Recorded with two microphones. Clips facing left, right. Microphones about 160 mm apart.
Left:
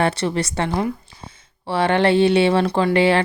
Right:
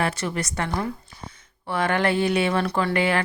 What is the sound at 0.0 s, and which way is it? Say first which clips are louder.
Speech: left 6 dB; 30° left (ahead or behind).